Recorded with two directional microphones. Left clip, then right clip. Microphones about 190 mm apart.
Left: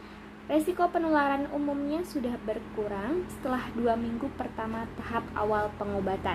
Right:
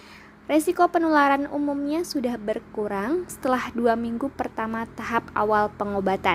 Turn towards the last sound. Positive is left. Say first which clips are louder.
# right 7 dB
turn(degrees=-45)  # may be behind; listen again after turning